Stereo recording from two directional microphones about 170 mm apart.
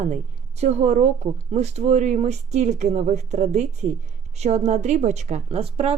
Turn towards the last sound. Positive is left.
turn(degrees=-35)  # may be behind; listen again after turning